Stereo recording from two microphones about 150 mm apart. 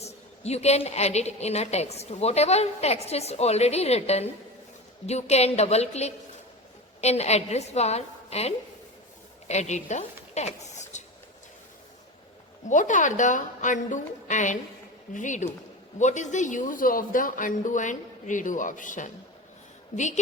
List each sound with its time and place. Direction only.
0.0 s a woman's voice: 45° left (ahead or behind)
10.3 s a sound: 50° left (ahead or behind)
12.6 s a man's voice: 55° left (ahead or behind)